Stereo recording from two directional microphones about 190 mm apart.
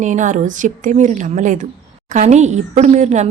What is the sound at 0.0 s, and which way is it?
A woman's voice, 40° right (ahead or behind).